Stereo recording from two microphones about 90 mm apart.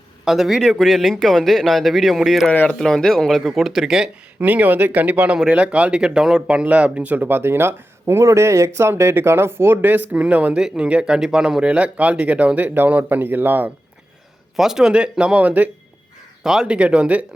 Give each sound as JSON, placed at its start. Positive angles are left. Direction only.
{"t": 0.3, "sound": "speech", "side_deg": -5}
{"t": 2.5, "sound": "speech", "side_deg": 15}
{"t": 4.4, "sound": "speech", "side_deg": -20}
{"t": 14.5, "sound": "speech", "side_deg": -5}
{"t": 16.4, "sound": "speech", "side_deg": -5}